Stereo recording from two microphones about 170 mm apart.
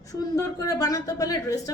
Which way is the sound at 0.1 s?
20° left (ahead or behind).